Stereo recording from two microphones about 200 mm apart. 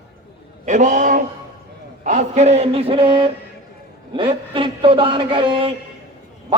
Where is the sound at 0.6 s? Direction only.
40° right (ahead or behind).